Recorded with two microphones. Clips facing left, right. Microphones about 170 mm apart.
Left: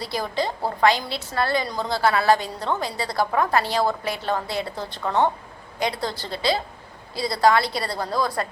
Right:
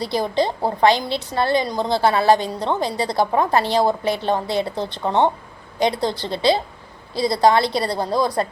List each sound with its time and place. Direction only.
0.0 s a woman's voice: 25° right (ahead or behind)